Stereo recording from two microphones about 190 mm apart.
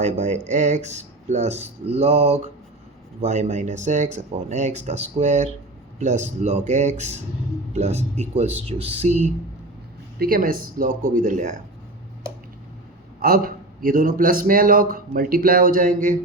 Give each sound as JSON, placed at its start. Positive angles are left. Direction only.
{"t": 0.0, "sound": "speech", "side_deg": -40}
{"t": 10.2, "sound": "a man's voice", "side_deg": -50}
{"t": 13.2, "sound": "a man's voice", "side_deg": -50}